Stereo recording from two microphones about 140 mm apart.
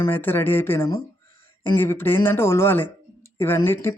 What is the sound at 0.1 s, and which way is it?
Speech, 15° left (ahead or behind).